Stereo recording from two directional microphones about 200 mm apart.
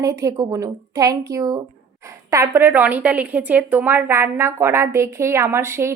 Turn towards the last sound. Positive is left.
turn(degrees=-15)  # may be behind; listen again after turning